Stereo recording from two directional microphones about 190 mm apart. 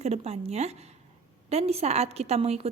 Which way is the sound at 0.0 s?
35° right (ahead or behind).